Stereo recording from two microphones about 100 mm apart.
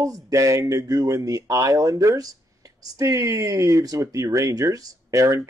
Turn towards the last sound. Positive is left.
turn(degrees=-35)  # may be behind; listen again after turning